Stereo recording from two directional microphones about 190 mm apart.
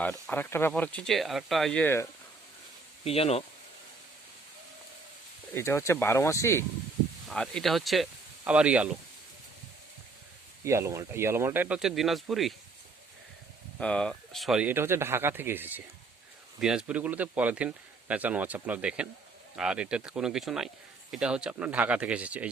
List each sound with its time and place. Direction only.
0.0 s speech: 10° left (ahead or behind)
3.0 s speech: 30° left (ahead or behind)
5.5 s speech: 15° left (ahead or behind)
7.3 s speech: centre (ahead or behind)
10.6 s speech: 15° right (ahead or behind)
13.7 s speech: 5° left (ahead or behind)